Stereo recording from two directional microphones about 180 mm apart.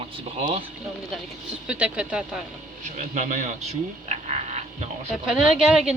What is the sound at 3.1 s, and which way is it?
Speech, 45° right (ahead or behind).